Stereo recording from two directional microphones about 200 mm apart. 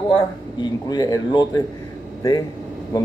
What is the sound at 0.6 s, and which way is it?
Speech, 20° left (ahead or behind).